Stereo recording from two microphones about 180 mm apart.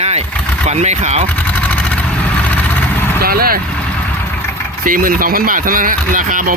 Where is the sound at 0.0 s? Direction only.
35° right (ahead or behind).